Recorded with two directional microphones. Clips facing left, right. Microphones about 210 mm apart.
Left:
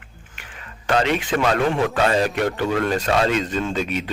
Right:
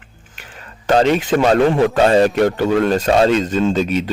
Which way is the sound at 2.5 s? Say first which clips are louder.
Right 6 dB; 40° right (ahead or behind).